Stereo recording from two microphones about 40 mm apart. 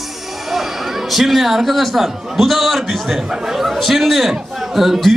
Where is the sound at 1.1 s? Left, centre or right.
Centre.